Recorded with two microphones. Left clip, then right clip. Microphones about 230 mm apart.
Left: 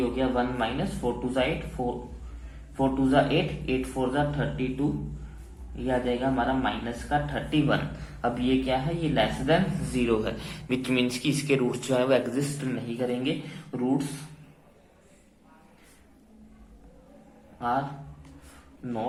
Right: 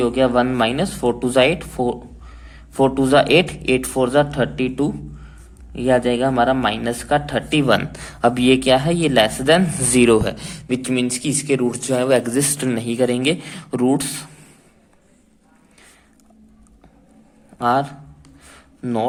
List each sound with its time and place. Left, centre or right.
0.2 s speech: right
17.6 s a man's voice: right